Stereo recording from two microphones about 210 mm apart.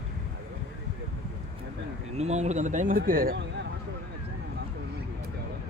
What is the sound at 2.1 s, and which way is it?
Speech, 30° right (ahead or behind).